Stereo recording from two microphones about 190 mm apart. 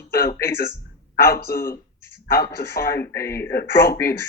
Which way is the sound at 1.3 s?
50° left (ahead or behind).